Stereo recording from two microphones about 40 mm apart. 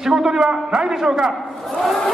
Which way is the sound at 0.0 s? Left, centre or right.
Centre.